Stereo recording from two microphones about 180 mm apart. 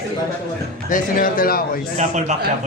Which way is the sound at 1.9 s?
40° right (ahead or behind).